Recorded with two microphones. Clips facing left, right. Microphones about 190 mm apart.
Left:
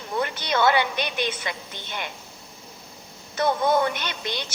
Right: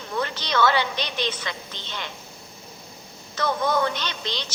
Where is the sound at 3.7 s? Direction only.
20° left (ahead or behind).